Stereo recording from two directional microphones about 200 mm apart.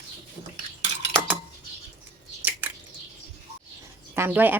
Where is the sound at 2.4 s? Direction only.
10° right (ahead or behind).